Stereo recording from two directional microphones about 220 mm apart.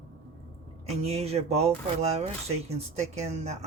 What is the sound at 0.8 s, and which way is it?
Speech, 30° right (ahead or behind).